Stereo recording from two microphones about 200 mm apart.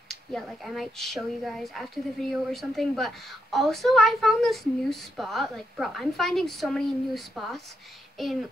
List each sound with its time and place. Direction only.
0.1 s speech: centre (ahead or behind)